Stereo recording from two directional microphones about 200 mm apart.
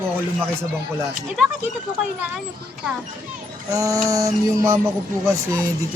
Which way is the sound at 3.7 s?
15° right (ahead or behind).